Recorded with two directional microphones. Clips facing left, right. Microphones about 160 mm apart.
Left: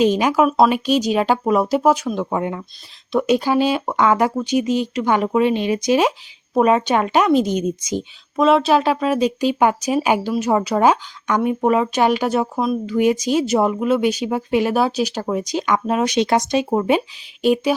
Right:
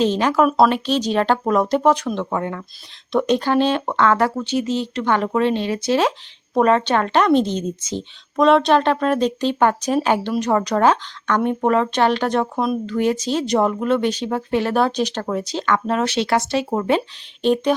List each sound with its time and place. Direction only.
0.0 s speech: 10° left (ahead or behind)